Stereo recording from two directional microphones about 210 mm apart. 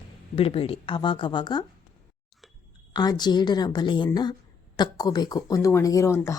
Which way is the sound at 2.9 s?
20° left (ahead or behind).